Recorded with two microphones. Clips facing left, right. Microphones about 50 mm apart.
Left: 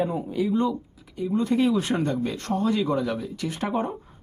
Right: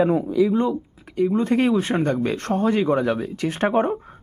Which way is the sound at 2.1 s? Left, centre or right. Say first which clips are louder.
Right 4 dB; right.